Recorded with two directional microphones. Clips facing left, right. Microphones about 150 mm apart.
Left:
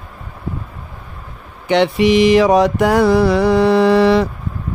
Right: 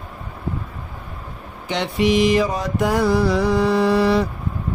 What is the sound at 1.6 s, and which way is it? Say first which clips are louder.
Mantra: left 7 dB; 70° left (ahead or behind).